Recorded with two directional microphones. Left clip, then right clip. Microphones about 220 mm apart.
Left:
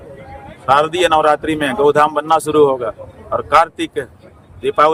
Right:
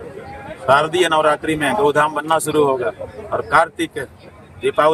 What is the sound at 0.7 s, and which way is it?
Speech, 25° left (ahead or behind).